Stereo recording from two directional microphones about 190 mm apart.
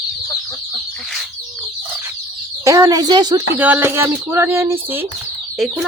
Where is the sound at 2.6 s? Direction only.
20° right (ahead or behind).